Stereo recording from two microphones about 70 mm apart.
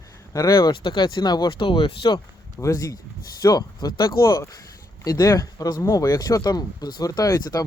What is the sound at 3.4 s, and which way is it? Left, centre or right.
Speech, left.